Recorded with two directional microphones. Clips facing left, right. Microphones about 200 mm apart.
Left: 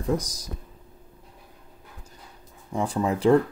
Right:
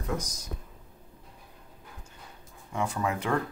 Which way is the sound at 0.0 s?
35° left (ahead or behind).